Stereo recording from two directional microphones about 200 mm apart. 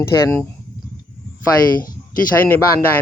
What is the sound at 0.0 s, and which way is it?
Speech, 10° left (ahead or behind).